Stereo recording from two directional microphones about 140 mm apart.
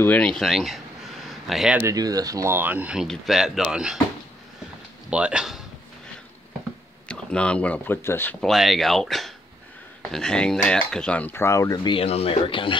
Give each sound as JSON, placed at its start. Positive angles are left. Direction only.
{"t": 0.0, "sound": "speech", "side_deg": 10}
{"t": 1.2, "sound": "a sound", "side_deg": 0}
{"t": 1.8, "sound": "speech", "side_deg": -25}
{"t": 5.1, "sound": "speech", "side_deg": -5}
{"t": 7.1, "sound": "speech", "side_deg": 5}
{"t": 8.4, "sound": "speech", "side_deg": 0}